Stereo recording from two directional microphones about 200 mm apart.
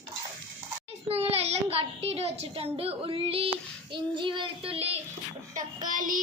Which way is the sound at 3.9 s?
25° right (ahead or behind).